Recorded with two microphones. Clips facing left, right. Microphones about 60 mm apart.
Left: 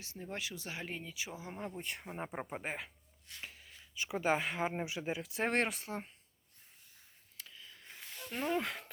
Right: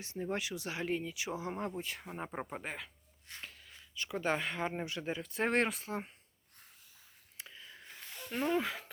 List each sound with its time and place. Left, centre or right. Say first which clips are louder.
0.2 s speech: right 6 dB; centre
0.9 s speech: right 8 dB; centre
1.2 s speech: right 5 dB; centre
1.8 s speech: even; centre
2.6 s speech: left 2 dB; centre
7.3 s a sound: right 3 dB; right
7.9 s a sound: right 1 dB; centre